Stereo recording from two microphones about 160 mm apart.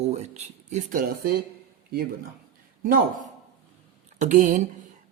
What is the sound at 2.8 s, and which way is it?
Speech, 65° right (ahead or behind).